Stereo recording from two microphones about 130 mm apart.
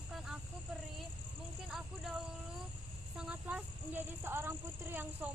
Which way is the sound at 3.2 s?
10° right (ahead or behind).